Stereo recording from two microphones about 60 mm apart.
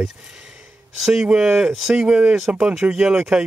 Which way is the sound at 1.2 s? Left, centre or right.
Centre.